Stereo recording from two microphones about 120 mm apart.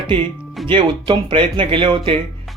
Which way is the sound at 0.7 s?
45° right (ahead or behind).